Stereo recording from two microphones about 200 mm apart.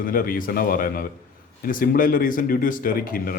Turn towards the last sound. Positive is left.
turn(degrees=45)  # may be behind; listen again after turning